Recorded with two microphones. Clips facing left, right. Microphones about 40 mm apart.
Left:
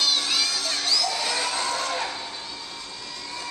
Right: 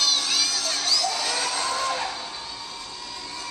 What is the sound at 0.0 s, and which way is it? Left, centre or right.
Music, centre.